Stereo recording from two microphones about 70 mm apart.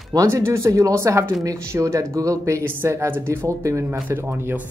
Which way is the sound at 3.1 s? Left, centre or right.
Right.